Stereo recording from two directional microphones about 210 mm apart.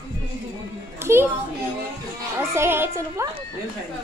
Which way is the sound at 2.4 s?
10° right (ahead or behind).